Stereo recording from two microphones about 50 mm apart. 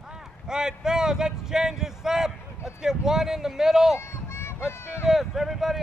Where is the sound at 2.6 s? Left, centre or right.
Centre.